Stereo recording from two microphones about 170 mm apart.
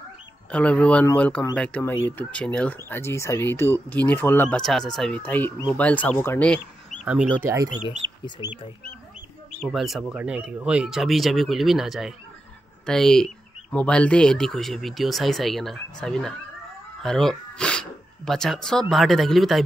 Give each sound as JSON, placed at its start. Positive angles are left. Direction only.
{"t": 0.5, "sound": "speech", "side_deg": 5}
{"t": 7.3, "sound": "speech", "side_deg": -15}
{"t": 8.0, "sound": "bird", "side_deg": -30}
{"t": 8.4, "sound": "speech", "side_deg": 30}
{"t": 9.6, "sound": "speech", "side_deg": 0}